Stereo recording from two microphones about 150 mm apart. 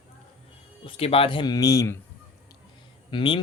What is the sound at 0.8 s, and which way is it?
Speech, 40° left (ahead or behind).